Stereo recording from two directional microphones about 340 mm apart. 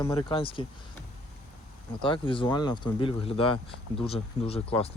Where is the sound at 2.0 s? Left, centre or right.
Centre.